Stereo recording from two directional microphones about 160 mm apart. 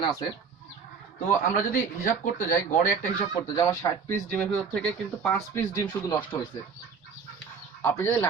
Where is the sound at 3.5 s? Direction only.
20° left (ahead or behind).